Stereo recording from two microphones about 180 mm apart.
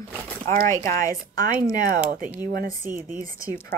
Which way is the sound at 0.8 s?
20° left (ahead or behind).